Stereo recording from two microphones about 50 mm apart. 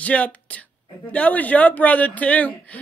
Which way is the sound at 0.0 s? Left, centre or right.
Left.